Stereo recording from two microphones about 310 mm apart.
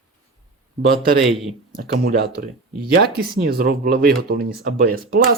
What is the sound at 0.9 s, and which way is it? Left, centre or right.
Speech, right.